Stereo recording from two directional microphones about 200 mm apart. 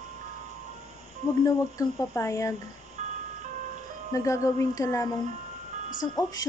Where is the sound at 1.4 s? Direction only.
15° left (ahead or behind).